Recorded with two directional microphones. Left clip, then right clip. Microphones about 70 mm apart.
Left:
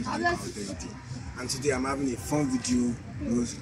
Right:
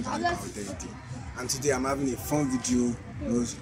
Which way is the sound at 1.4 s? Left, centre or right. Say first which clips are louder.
Right 1 dB; right.